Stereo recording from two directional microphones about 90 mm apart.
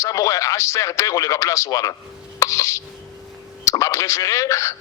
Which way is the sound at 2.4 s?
35° left (ahead or behind).